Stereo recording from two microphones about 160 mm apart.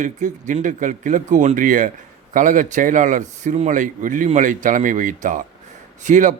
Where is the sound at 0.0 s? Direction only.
50° right (ahead or behind).